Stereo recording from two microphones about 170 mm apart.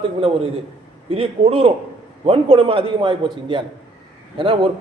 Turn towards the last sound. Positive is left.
turn(degrees=-30)  # may be behind; listen again after turning